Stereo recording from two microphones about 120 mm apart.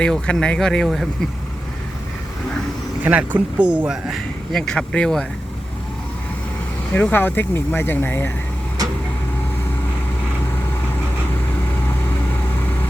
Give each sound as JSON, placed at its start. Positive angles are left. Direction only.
{"t": 0.0, "sound": "speech", "side_deg": 5}
{"t": 3.0, "sound": "speech", "side_deg": -10}
{"t": 6.9, "sound": "speech", "side_deg": 15}